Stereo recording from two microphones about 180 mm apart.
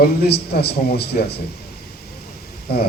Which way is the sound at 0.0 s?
60° left (ahead or behind).